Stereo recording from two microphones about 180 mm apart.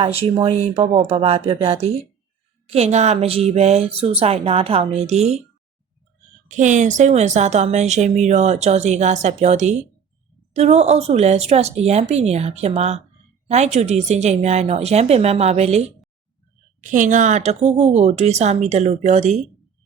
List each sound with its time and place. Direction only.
0.0 s a woman's voice: 35° right (ahead or behind)
6.5 s a woman's voice: 45° right (ahead or behind)